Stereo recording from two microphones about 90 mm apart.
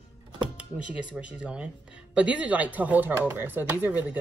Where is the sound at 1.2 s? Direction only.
10° right (ahead or behind).